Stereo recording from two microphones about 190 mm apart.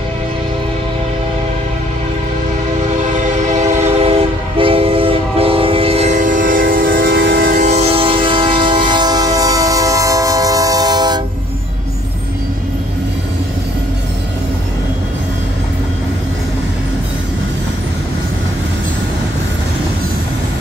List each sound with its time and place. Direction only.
3.3 s train: 40° right (ahead or behind); by 11.1 s 20° right (ahead or behind)